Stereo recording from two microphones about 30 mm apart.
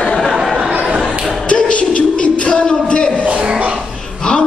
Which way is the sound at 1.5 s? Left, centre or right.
Left.